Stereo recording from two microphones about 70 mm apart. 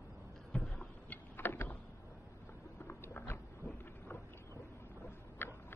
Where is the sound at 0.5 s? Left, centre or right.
Centre.